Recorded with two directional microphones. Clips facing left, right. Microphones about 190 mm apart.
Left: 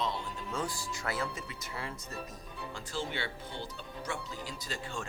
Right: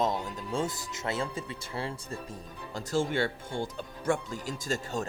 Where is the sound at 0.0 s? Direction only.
45° right (ahead or behind).